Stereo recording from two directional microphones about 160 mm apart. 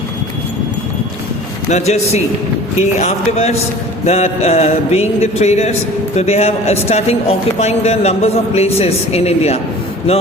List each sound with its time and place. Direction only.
1.7 s a man's voice: 40° left (ahead or behind)